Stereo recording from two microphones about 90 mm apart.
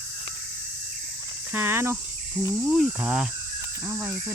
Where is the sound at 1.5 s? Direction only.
25° right (ahead or behind).